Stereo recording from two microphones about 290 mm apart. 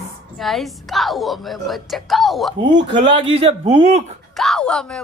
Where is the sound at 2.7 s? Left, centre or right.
Centre.